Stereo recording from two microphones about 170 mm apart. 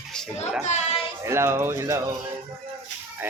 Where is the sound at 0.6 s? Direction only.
45° left (ahead or behind).